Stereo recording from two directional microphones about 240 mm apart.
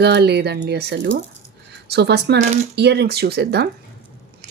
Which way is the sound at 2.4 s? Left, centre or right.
Right.